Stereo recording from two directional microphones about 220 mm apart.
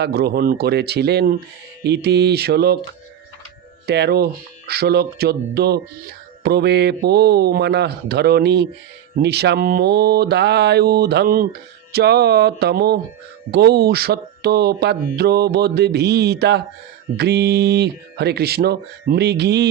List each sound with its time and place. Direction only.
0.0 s speech: 45° right (ahead or behind)
3.8 s speech: 50° right (ahead or behind)